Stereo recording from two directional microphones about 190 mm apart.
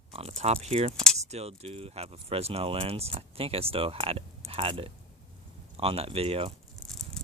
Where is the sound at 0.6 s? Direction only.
35° right (ahead or behind).